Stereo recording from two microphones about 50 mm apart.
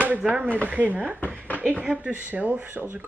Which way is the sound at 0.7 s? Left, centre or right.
Right.